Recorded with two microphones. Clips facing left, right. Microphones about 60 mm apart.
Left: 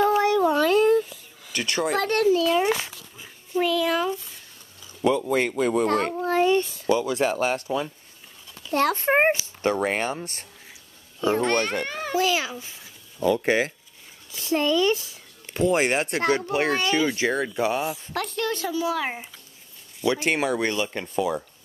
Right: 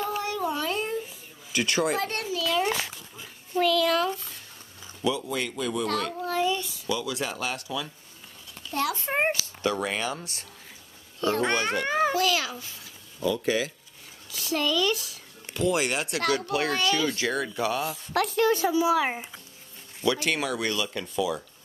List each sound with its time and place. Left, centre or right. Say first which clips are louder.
0.5 s a sound: left 10 dB; left
1.5 s speech: even; centre
2.0 s a child's voice: left 7 dB; left
2.3 s a sound: left 6 dB; left
3.2 s a sound: left 1 dB; centre
5.0 s speech: left 6 dB; left
11.1 s a child's voice: left 3 dB; centre
11.8 s a child's voice: right 4 dB; centre
12.2 s speech: left 2 dB; left
13.2 s speech: left 5 dB; left
14.3 s speech: left 4 dB; left
18.1 s speech: right 8 dB; centre
20.1 s speech: left 3 dB; left